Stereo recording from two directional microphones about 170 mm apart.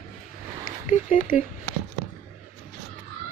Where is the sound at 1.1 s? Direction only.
55° left (ahead or behind).